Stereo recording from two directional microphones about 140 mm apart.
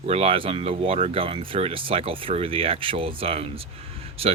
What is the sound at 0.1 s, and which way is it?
Speech, 45° right (ahead or behind).